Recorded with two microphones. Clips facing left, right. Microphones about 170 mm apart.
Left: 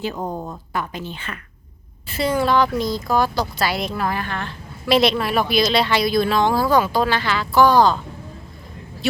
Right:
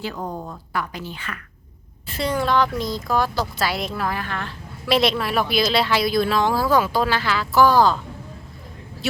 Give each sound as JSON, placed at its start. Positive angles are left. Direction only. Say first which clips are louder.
{"t": 0.0, "sound": "speech", "louder": "left 3 dB", "side_deg": 20}
{"t": 2.0, "sound": "a woman's voice", "louder": "left 3 dB", "side_deg": 5}